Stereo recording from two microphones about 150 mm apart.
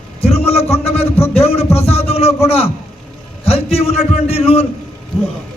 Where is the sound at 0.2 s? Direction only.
45° left (ahead or behind).